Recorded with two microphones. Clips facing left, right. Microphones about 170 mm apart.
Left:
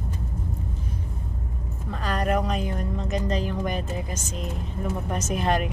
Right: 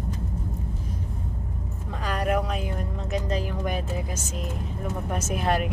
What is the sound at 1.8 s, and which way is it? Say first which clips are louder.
Speech: left 1 dB; 10° right (ahead or behind).